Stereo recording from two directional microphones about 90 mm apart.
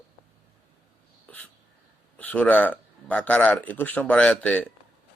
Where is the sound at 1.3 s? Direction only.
20° left (ahead or behind).